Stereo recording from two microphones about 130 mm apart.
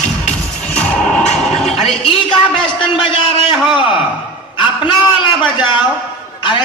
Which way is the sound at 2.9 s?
35° left (ahead or behind).